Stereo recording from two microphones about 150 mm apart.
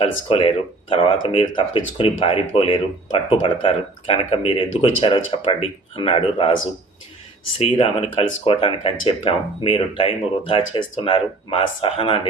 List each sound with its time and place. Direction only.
0.0 s speech: 35° left (ahead or behind)
7.6 s speech: 35° left (ahead or behind)